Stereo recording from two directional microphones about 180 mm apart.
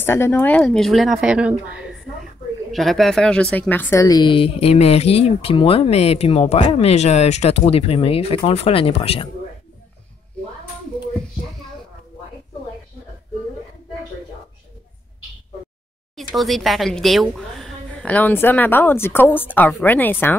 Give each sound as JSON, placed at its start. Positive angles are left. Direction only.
{"t": 0.0, "sound": "a woman's voice", "side_deg": 15}
{"t": 16.2, "sound": "speech", "side_deg": 0}